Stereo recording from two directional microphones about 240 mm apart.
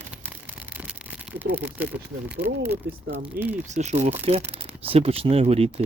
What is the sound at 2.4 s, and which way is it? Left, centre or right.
Speech, right.